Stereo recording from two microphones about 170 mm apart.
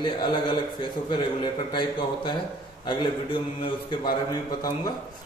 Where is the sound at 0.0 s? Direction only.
25° left (ahead or behind).